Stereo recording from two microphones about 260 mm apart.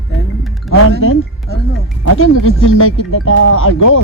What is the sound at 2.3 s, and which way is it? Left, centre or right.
Speech, left.